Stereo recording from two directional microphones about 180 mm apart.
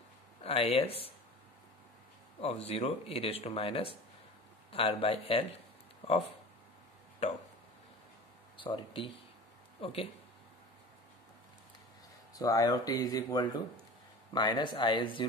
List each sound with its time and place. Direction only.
0.4 s speech: 35° left (ahead or behind)
2.4 s speech: 35° left (ahead or behind)
8.5 s speech: 30° left (ahead or behind)
12.4 s speech: 20° left (ahead or behind)